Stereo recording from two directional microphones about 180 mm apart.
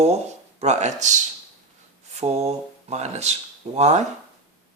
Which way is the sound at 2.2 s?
35° right (ahead or behind).